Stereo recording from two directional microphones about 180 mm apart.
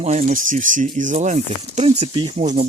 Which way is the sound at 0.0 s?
40° right (ahead or behind).